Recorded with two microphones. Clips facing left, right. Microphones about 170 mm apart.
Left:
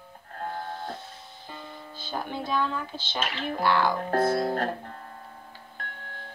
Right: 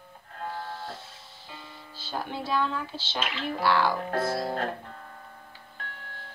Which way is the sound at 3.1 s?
40° left (ahead or behind).